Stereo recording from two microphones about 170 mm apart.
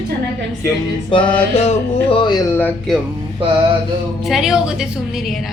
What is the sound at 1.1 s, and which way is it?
Speech, 30° left (ahead or behind).